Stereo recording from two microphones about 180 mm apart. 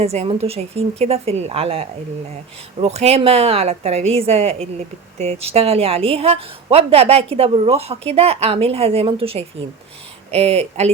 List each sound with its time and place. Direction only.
0.0 s a woman's voice: 35° right (ahead or behind)